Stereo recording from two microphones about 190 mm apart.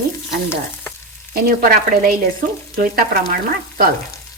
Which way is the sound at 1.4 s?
55° right (ahead or behind).